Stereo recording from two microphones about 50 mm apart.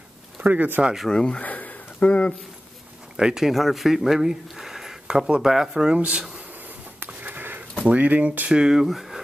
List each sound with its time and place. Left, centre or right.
0.4 s speech: right
1.0 s speech: centre
1.4 s a sound: left
3.2 s speech: centre
5.9 s speech: right
7.2 s sniff: right
7.9 s speech: right
8.5 s speech: centre
8.8 s speech: centre